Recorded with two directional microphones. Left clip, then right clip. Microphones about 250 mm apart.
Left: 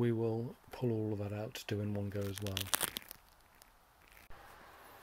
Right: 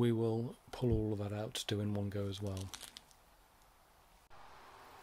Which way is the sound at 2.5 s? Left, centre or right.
Left.